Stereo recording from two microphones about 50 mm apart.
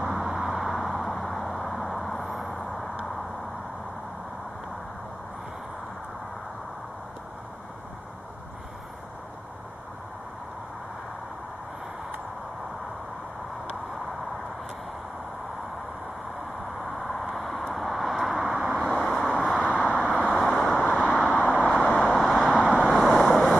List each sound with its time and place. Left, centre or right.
0.0 s a sound: centre
16.6 s vehicle: centre
19.6 s vehicle: centre
21.0 s vehicle: centre
21.6 s vehicle: centre
22.6 s vehicle: centre
22.8 s vehicle: centre